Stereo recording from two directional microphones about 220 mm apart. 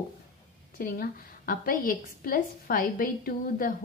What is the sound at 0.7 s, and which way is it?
A woman's voice, 40° left (ahead or behind).